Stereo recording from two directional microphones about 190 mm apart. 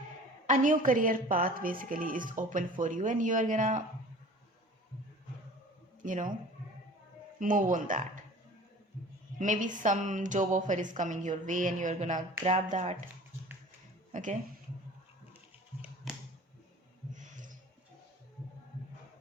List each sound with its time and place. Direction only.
0.4 s a woman's voice: 40° right (ahead or behind)
6.0 s speech: 45° right (ahead or behind)
7.3 s a woman's voice: 45° right (ahead or behind)
9.4 s speech: 40° right (ahead or behind)
14.1 s speech: 40° right (ahead or behind)
17.2 s a sound: 45° right (ahead or behind)